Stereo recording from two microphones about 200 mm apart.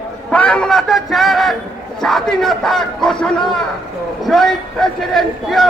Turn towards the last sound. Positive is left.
turn(degrees=0)  # may be behind; listen again after turning